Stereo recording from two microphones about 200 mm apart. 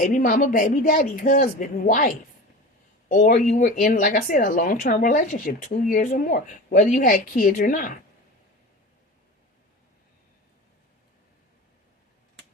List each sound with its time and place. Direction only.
0.0 s speech: 40° left (ahead or behind)